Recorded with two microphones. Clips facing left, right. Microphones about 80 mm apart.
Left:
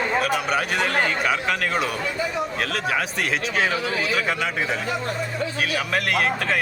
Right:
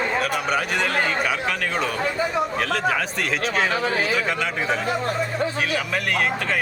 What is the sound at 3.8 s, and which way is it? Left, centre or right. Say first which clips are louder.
Speech: right 2 dB; right.